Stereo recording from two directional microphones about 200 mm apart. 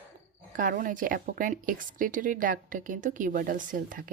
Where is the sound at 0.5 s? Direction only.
45° right (ahead or behind).